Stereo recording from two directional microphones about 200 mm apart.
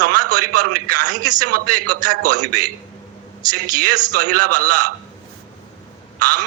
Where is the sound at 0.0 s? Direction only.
40° right (ahead or behind).